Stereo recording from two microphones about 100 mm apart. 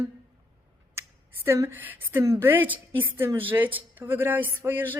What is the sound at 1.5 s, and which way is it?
A woman's voice, 25° right (ahead or behind).